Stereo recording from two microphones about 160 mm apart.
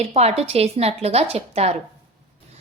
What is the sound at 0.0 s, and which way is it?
A woman's voice, 40° right (ahead or behind).